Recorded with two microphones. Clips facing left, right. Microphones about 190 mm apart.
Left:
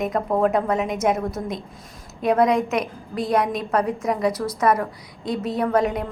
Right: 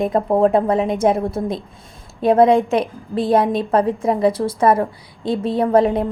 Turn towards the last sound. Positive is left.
turn(degrees=-30)  # may be behind; listen again after turning